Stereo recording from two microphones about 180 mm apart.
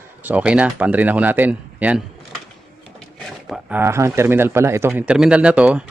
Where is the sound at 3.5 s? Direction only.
10° right (ahead or behind).